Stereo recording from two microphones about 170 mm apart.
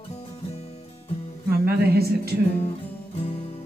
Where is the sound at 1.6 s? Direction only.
70° right (ahead or behind).